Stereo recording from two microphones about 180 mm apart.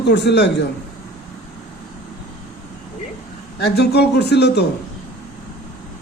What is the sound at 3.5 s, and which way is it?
Speech, 65° left (ahead or behind).